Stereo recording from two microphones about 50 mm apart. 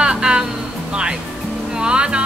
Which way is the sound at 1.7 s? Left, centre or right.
Centre.